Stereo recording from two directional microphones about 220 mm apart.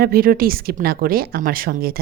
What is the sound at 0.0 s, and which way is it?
A woman's voice, 40° right (ahead or behind).